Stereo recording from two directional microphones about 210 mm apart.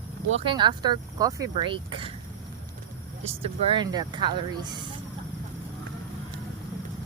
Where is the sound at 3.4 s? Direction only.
25° right (ahead or behind).